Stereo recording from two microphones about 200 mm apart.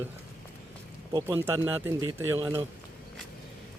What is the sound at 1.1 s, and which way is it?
Speech, 15° right (ahead or behind).